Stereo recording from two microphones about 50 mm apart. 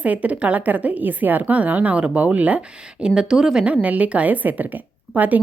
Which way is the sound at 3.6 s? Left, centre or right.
Right.